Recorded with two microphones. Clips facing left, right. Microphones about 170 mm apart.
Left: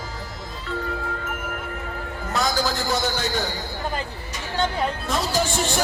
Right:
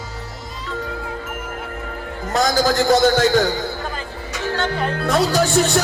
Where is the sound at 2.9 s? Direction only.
90° right.